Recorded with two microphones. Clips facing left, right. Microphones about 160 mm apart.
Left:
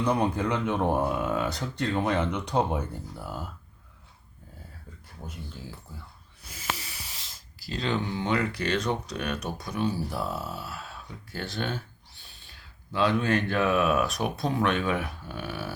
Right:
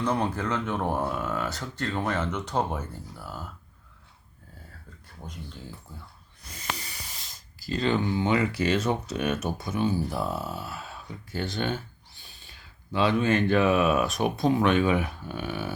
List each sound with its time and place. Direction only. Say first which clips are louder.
0.0 s speech: left 2 dB; 15° left (ahead or behind)
5.2 s speech: even; 5° left (ahead or behind)
6.5 s hiss: left 1 dB; 5° left (ahead or behind)
7.3 s speech: right 6 dB; centre (ahead or behind)